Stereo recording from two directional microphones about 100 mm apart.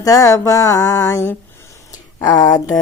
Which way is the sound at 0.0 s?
35° left (ahead or behind).